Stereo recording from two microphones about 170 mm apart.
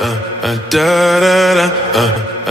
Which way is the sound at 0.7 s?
Centre (ahead or behind).